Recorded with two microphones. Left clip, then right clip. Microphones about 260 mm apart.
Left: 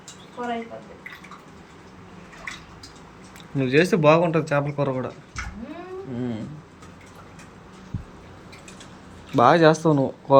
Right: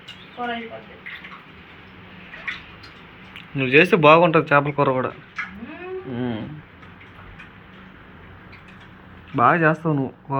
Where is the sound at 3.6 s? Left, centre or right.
Centre.